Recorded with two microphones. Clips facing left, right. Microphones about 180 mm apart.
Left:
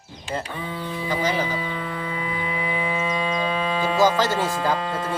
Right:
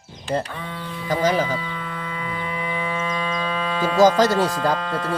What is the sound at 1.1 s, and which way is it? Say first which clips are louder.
Speech: right 5 dB; 45° right (ahead or behind).